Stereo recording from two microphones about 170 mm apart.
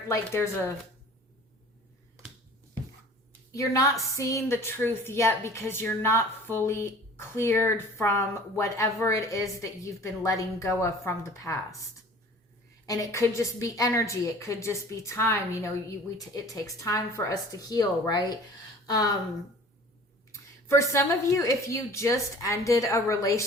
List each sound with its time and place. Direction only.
0.1 s a woman's voice: 15° left (ahead or behind)
3.5 s a woman's voice: 20° left (ahead or behind)
12.8 s a woman's voice: 20° left (ahead or behind)
20.3 s a woman's voice: 15° left (ahead or behind)